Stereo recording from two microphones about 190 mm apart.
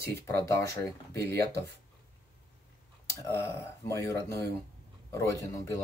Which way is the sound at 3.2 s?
10° left (ahead or behind).